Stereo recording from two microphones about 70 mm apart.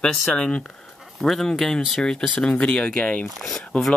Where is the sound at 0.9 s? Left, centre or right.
Centre.